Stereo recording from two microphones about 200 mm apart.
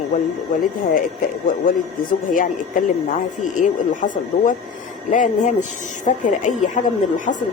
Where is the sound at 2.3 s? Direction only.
45° left (ahead or behind).